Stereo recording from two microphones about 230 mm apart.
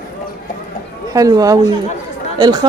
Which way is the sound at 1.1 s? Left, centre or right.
Centre.